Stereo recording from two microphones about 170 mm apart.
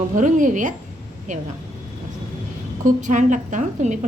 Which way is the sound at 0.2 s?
50° right (ahead or behind).